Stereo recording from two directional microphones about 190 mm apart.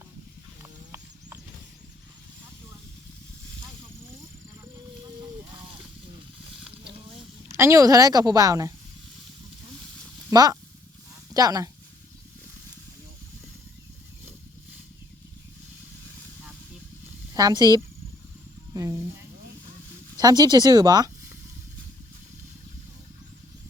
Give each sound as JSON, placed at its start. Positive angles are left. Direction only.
{"t": 0.6, "sound": "horse", "side_deg": -15}
{"t": 7.5, "sound": "a woman's voice", "side_deg": -15}
{"t": 10.2, "sound": "a sound", "side_deg": -20}
{"t": 11.3, "sound": "speech", "side_deg": -20}
{"t": 17.3, "sound": "speech", "side_deg": -20}
{"t": 18.7, "sound": "a sound", "side_deg": -20}
{"t": 20.1, "sound": "speech", "side_deg": -20}